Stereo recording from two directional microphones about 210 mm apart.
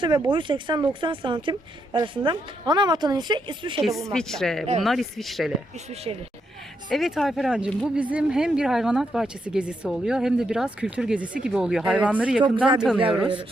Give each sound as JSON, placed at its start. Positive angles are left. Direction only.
{"t": 0.0, "sound": "a woman's voice", "side_deg": -20}
{"t": 4.1, "sound": "speech", "side_deg": 5}
{"t": 6.1, "sound": "a woman's voice", "side_deg": -25}
{"t": 6.9, "sound": "speech", "side_deg": 0}